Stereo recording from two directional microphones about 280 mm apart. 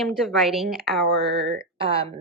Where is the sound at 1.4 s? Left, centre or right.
Right.